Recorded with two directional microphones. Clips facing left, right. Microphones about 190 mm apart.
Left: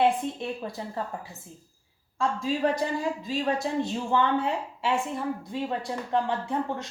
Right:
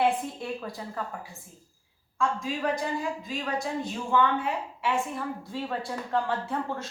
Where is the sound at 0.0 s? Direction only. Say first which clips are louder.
Left 2 dB; 25° left (ahead or behind).